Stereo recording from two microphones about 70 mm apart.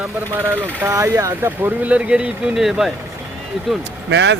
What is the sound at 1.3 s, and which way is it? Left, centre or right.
Speech, right.